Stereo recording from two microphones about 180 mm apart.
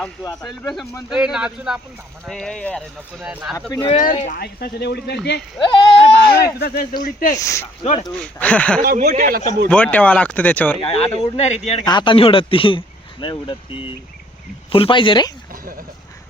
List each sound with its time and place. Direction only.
0.2 s speech: 20° left (ahead or behind)
0.6 s speech: 5° left (ahead or behind)
3.7 s speech: 25° left (ahead or behind)
4.1 s speech: 40° left (ahead or behind)
4.4 s speech: 65° left (ahead or behind)
5.5 s speech: 25° left (ahead or behind)
6.0 s speech: 60° left (ahead or behind)
7.3 s speech: 15° left (ahead or behind)
8.8 s speech: 55° right (ahead or behind)
9.6 s speech: 5° left (ahead or behind)
10.8 s speech: 35° left (ahead or behind)
11.9 s speech: 25° left (ahead or behind)